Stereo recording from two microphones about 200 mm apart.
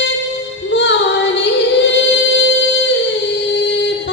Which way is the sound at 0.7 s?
60° left (ahead or behind).